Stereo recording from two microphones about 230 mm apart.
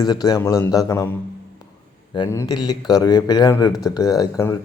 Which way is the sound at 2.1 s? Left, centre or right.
Centre.